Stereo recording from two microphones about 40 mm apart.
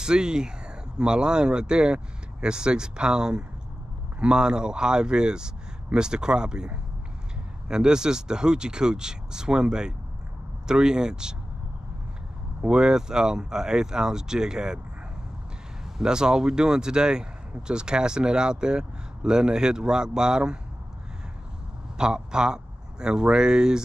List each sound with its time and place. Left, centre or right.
0.0 s speech: centre
12.6 s speech: centre
16.0 s speech: centre
21.9 s speech: centre